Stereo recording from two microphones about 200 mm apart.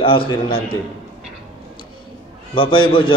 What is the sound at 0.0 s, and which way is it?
Speech, 25° left (ahead or behind).